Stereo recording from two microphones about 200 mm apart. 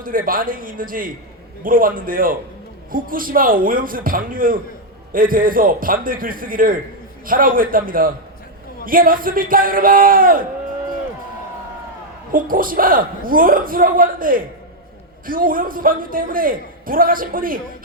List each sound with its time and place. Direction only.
0.0 s a man's voice: 45° right (ahead or behind)
12.3 s a man's voice: 45° right (ahead or behind)